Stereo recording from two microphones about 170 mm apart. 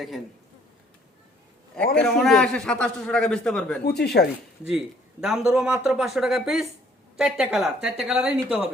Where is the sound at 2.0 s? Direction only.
Centre (ahead or behind).